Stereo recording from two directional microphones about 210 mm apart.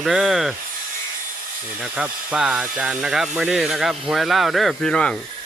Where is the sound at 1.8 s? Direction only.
5° right (ahead or behind).